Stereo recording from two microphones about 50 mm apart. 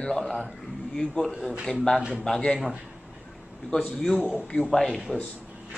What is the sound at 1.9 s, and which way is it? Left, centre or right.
Speech, left.